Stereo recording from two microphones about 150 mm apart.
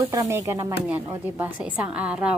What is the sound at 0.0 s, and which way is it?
Speech, 20° right (ahead or behind).